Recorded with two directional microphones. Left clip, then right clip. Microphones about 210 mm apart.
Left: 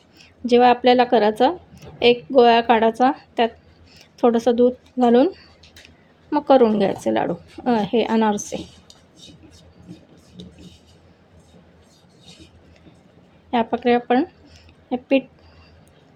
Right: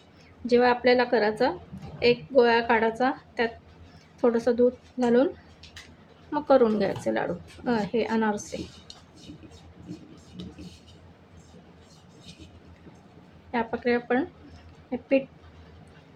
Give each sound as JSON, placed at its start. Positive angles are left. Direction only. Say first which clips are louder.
{"t": 0.4, "sound": "a woman's voice", "louder": "left 7 dB", "side_deg": 35}
{"t": 6.3, "sound": "a woman's voice", "louder": "left 6 dB", "side_deg": 25}
{"t": 13.5, "sound": "a woman's voice", "louder": "left 8 dB", "side_deg": 35}